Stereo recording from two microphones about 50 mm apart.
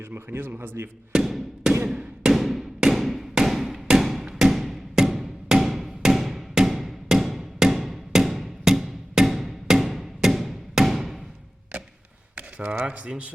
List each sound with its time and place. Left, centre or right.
0.0 s a man's voice: right
1.1 s music: centre
1.8 s a sound: centre
2.3 s a sound: centre
4.4 s music: centre
12.4 s speech: right